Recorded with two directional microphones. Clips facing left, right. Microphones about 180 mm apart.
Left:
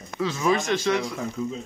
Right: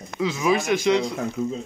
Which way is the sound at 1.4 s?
45° right (ahead or behind).